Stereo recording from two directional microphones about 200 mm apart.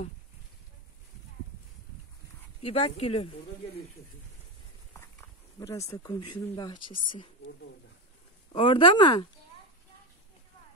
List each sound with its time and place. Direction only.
2.6 s speech: 30° left (ahead or behind)
4.9 s speech: 15° left (ahead or behind)
8.5 s speech: 25° left (ahead or behind)